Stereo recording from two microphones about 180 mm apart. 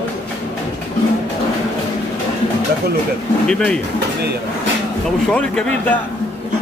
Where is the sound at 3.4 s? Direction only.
5° left (ahead or behind).